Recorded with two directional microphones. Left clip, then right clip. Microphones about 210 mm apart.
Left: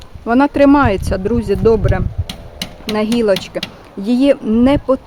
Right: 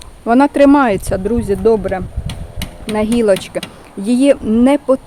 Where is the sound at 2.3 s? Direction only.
55° left (ahead or behind).